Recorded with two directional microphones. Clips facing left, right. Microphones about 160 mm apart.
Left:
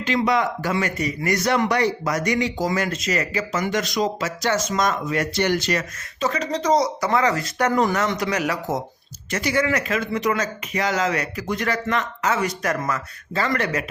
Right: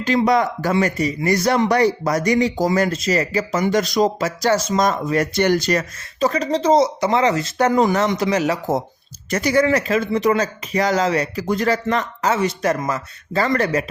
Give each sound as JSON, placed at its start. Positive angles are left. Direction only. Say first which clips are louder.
{"t": 0.3, "sound": "speech", "louder": "right 4 dB", "side_deg": -40}
{"t": 9.3, "sound": "speech", "louder": "right 5 dB", "side_deg": -40}
{"t": 13.3, "sound": "speech", "louder": "right 5 dB", "side_deg": -35}